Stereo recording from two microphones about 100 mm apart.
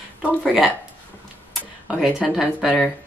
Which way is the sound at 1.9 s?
5° right (ahead or behind).